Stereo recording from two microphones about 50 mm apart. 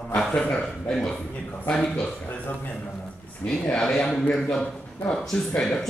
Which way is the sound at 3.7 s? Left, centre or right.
Centre.